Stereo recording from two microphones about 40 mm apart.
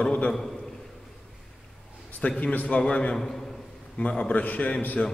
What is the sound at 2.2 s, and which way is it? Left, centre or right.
Speech, left.